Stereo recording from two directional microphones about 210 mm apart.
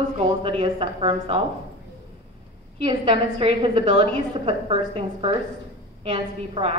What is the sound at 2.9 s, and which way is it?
A woman's voice, 30° right (ahead or behind).